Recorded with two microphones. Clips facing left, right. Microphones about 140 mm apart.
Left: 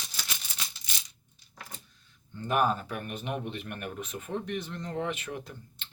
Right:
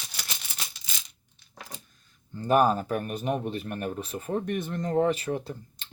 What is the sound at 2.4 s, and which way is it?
Speech, 35° right (ahead or behind).